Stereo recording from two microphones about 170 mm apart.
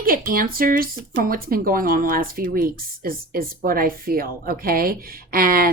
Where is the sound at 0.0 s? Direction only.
60° right (ahead or behind).